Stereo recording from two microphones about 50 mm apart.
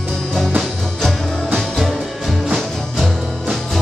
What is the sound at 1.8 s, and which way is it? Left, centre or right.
Music, centre.